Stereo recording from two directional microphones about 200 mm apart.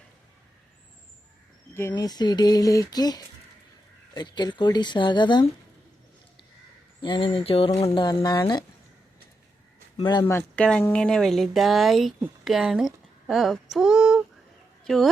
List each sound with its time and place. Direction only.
1.9 s speech: 20° left (ahead or behind)
7.0 s speech: 25° left (ahead or behind)
10.0 s a woman's voice: 20° left (ahead or behind); by 15.1 s centre (ahead or behind)